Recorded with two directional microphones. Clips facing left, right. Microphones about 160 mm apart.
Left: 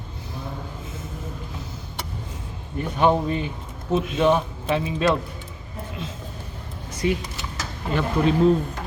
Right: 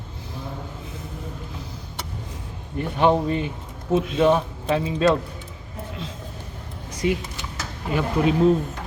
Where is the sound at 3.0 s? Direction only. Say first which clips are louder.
Right 1 dB; 30° right (ahead or behind).